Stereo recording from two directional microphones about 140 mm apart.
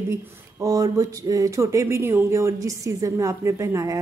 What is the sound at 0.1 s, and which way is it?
A woman's voice, 25° right (ahead or behind).